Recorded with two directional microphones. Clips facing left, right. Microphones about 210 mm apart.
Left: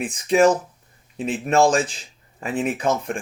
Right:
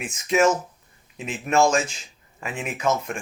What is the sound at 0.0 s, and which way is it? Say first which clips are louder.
Speech: left 4 dB; 35° left (ahead or behind).